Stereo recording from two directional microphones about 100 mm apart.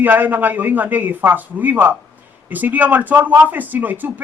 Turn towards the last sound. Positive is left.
turn(degrees=-15)  # may be behind; listen again after turning